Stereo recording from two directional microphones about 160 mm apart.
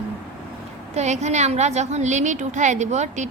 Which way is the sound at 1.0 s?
45° right (ahead or behind).